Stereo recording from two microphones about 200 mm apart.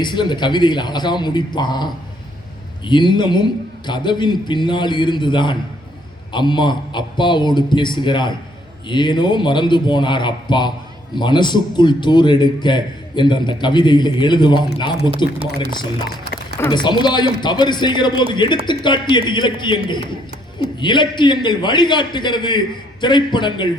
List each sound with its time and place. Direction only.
0.0 s a man's voice: 20° left (ahead or behind)
16.6 s a man's voice: 20° left (ahead or behind)